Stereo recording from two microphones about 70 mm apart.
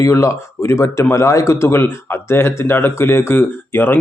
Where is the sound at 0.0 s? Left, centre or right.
Left.